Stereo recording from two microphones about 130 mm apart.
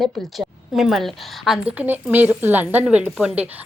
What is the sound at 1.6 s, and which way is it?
A woman's voice, 15° right (ahead or behind).